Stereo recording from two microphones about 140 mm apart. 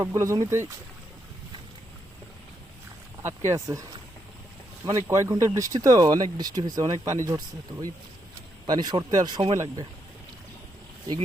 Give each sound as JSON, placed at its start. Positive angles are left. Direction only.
{"t": 0.0, "sound": "speech", "side_deg": -20}
{"t": 3.2, "sound": "speech", "side_deg": -20}
{"t": 4.9, "sound": "speech", "side_deg": -20}